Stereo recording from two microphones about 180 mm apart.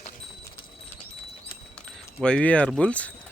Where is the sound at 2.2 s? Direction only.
5° left (ahead or behind).